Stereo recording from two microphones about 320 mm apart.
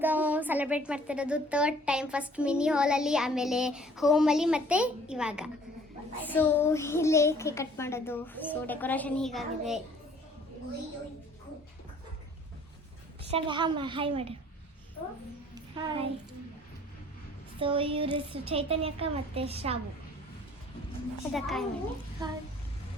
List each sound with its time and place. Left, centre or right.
0.0 s a woman's voice: centre
13.3 s a woman's voice: centre
15.5 s a child's voice: centre
17.6 s a woman's voice: centre
21.3 s a woman's voice: centre